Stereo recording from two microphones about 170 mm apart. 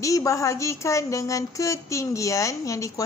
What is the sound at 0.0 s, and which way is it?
A woman's voice, 20° left (ahead or behind).